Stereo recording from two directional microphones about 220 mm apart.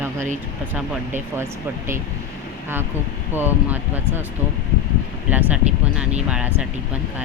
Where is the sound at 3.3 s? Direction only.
10° right (ahead or behind).